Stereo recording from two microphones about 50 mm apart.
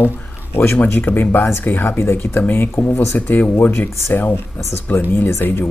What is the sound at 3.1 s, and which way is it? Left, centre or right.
Speech, left.